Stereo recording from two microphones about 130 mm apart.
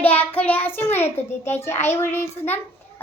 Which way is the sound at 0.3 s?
10° left (ahead or behind).